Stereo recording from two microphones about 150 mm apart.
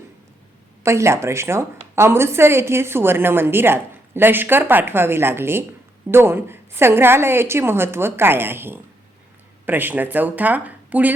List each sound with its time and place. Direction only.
0.8 s a woman's voice: 20° right (ahead or behind)